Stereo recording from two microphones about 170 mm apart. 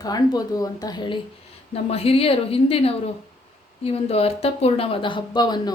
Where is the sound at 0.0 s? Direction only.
20° left (ahead or behind).